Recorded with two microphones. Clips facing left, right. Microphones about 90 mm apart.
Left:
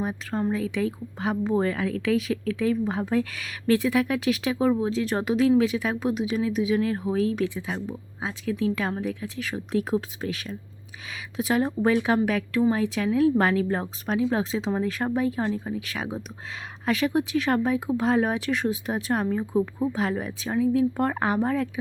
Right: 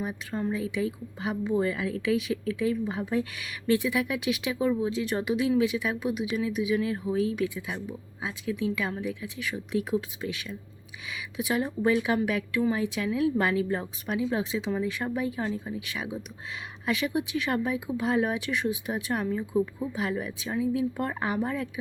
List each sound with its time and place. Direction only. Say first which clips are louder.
0.0 s a woman's voice: left 4 dB; 45° left (ahead or behind)
3.3 s speech: left 3 dB; 40° left (ahead or behind)
19.5 s speech: left 3 dB; 25° left (ahead or behind)
20.0 s speech: left 3 dB; 40° left (ahead or behind)